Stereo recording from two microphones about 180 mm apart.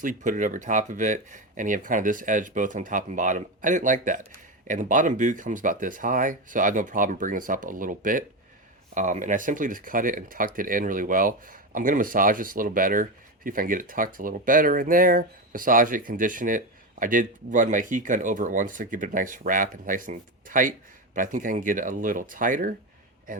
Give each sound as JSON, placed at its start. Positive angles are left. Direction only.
{"t": 0.0, "sound": "speech", "side_deg": -45}